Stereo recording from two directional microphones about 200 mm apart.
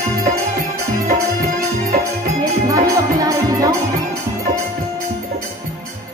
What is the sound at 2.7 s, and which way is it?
Music, 20° right (ahead or behind).